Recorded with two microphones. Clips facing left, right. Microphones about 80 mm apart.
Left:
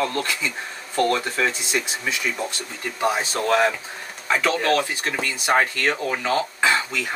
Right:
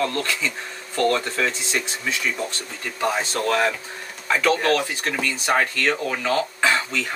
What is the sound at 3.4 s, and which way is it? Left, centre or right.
Speech, left.